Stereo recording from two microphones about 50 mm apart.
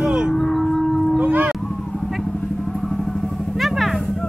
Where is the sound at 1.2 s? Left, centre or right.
Right.